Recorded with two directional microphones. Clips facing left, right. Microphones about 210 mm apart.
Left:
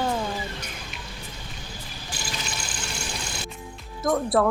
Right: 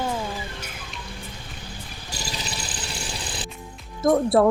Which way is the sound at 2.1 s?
40° right (ahead or behind).